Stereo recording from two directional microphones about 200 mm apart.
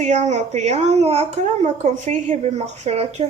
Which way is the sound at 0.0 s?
35° right (ahead or behind).